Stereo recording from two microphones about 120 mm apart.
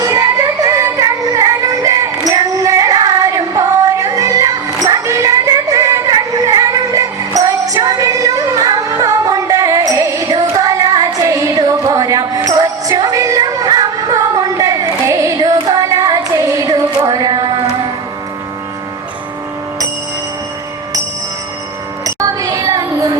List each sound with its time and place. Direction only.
0.0 s music: 30° right (ahead or behind)
22.0 s child singing: 30° right (ahead or behind)